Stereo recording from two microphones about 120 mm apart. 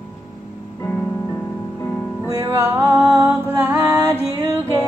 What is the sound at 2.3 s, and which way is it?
Music, 25° right (ahead or behind).